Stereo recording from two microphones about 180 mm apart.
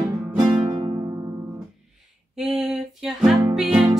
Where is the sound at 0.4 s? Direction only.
25° right (ahead or behind).